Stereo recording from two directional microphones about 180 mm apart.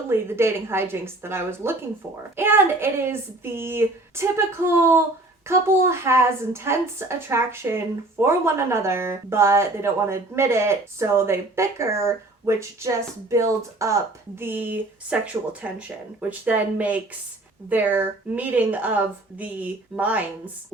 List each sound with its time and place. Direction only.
0.1 s speech: 15° right (ahead or behind)